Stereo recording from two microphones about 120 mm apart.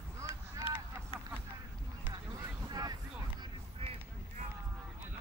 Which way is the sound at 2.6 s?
30° right (ahead or behind).